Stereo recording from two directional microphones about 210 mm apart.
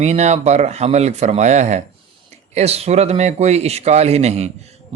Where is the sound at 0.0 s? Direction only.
30° right (ahead or behind).